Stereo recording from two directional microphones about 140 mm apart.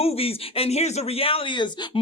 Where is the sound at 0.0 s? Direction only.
45° left (ahead or behind).